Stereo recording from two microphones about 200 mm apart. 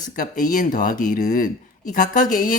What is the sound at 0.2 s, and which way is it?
Speech, 40° left (ahead or behind).